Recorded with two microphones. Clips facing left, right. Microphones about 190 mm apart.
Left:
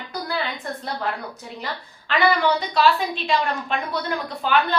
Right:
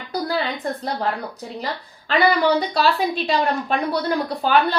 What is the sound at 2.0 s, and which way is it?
A woman's voice, 35° right (ahead or behind).